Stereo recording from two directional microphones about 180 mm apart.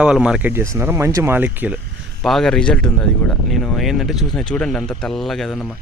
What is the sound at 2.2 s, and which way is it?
Speech, centre (ahead or behind).